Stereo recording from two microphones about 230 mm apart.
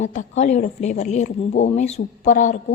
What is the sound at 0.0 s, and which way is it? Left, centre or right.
Speech, left.